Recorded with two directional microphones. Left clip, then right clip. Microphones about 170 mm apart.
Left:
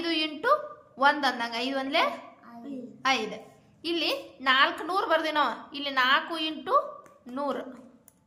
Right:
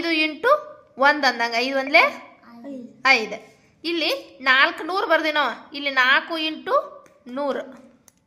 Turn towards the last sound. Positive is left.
turn(degrees=-25)  # may be behind; listen again after turning